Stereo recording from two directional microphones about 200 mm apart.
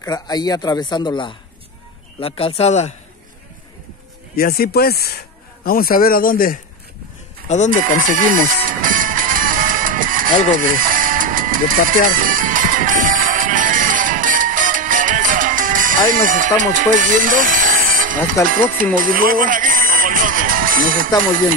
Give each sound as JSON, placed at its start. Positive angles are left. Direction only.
{"t": 0.0, "sound": "speech", "side_deg": 20}
{"t": 4.4, "sound": "speech", "side_deg": 50}
{"t": 8.0, "sound": "music", "side_deg": -40}
{"t": 16.7, "sound": "speech", "side_deg": -40}
{"t": 18.9, "sound": "music", "side_deg": -45}